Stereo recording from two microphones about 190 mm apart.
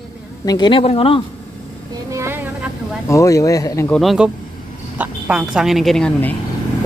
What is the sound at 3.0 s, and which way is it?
Speech, 15° left (ahead or behind).